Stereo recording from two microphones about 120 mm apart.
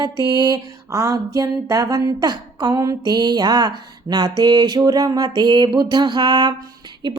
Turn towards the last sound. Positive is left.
turn(degrees=-40)  # may be behind; listen again after turning